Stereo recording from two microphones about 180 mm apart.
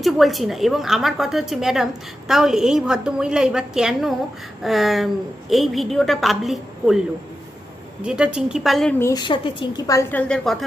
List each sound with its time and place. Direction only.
0.0 s speech: centre (ahead or behind)
8.0 s speech: 5° right (ahead or behind)
9.0 s a woman's voice: 20° left (ahead or behind); by 10.6 s 5° left (ahead or behind)